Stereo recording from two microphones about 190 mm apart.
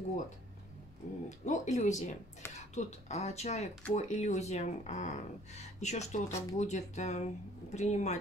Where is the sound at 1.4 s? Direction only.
40° left (ahead or behind).